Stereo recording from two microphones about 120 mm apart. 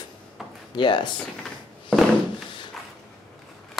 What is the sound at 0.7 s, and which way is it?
Speech, 40° left (ahead or behind).